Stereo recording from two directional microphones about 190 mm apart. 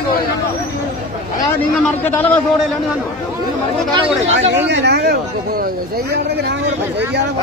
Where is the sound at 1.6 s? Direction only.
10° left (ahead or behind).